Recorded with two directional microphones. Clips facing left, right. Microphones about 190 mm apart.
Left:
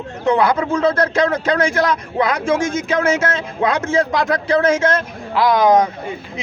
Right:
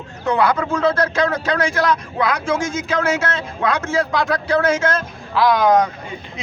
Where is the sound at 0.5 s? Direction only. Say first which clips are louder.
Left 2 dB; 20° left (ahead or behind).